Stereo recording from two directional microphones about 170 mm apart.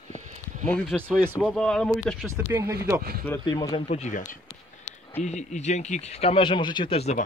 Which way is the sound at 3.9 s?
45° left (ahead or behind).